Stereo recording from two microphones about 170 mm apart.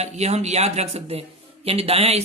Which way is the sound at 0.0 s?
40° right (ahead or behind).